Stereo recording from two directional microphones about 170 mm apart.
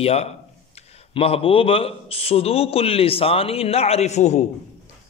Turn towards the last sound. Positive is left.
turn(degrees=40)  # may be behind; listen again after turning